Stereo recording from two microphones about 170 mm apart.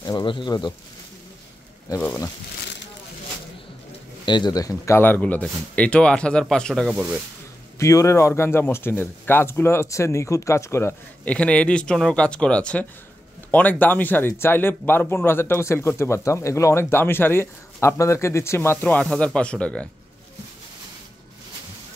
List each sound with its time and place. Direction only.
0.0 s speech: 25° left (ahead or behind)
4.3 s speech: 25° left (ahead or behind); by 6.9 s 5° left (ahead or behind)
7.8 s speech: 20° left (ahead or behind)